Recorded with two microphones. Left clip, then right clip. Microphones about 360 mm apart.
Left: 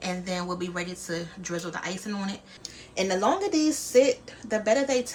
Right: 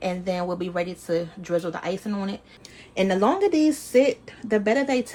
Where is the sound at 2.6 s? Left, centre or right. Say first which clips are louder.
Right 4 dB; right.